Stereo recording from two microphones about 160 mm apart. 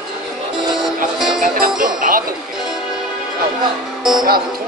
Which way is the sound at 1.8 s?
60° right (ahead or behind).